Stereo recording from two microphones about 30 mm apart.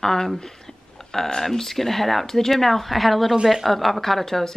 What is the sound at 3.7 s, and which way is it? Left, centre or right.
Speech, centre.